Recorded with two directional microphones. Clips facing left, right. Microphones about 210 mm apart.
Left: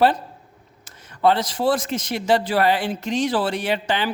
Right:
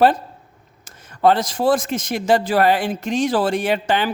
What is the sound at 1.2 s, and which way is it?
Speech, 45° right (ahead or behind).